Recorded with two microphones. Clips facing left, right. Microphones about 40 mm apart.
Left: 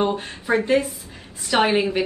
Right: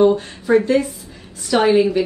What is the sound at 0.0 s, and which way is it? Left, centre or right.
A woman's voice, left.